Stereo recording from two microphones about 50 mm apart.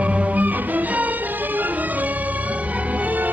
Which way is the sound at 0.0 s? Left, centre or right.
Right.